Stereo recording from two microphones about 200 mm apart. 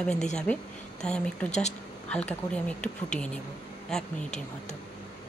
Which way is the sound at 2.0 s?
5° left (ahead or behind).